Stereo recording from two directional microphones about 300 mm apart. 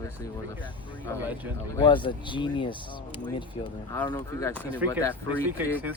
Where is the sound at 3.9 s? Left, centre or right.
Centre.